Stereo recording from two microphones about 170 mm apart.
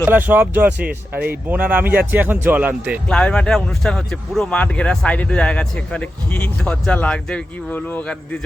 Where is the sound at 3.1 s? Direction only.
5° left (ahead or behind).